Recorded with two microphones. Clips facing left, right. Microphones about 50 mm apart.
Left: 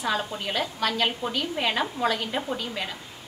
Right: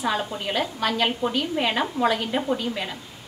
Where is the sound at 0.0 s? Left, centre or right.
Centre.